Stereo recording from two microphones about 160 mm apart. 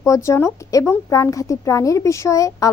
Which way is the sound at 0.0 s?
20° left (ahead or behind).